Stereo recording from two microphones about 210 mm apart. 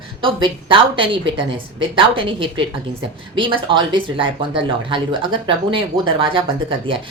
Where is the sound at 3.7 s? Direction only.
20° right (ahead or behind).